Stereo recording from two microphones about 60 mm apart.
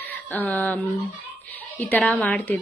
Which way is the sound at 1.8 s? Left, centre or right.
Left.